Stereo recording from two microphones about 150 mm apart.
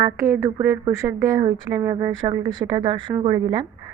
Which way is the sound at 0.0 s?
20° right (ahead or behind).